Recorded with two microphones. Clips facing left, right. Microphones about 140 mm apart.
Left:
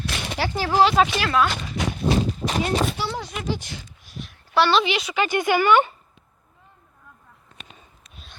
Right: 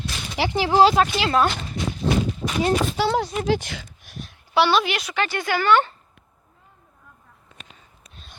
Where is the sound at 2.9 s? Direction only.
90° right.